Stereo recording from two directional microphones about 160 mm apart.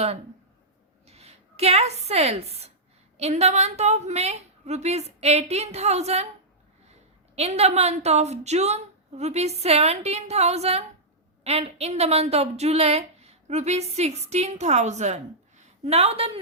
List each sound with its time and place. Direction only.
1.0 s a woman's voice: 40° right (ahead or behind)
7.3 s a woman's voice: 40° right (ahead or behind)